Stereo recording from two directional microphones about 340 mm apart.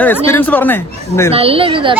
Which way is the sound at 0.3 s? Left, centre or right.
Centre.